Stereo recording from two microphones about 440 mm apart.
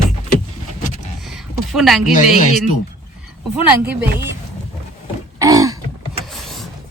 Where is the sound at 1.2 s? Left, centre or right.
Centre.